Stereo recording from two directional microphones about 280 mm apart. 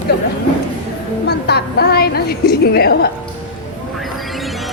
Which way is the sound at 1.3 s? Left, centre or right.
Left.